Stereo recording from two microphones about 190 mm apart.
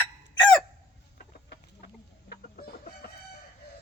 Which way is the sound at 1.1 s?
55° left (ahead or behind).